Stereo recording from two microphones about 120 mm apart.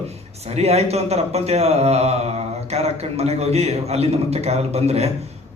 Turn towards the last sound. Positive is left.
turn(degrees=-60)  # may be behind; listen again after turning